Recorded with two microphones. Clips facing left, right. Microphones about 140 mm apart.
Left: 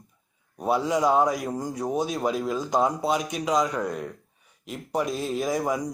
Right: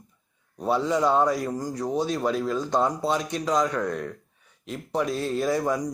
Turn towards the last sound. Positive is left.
turn(degrees=10)  # may be behind; listen again after turning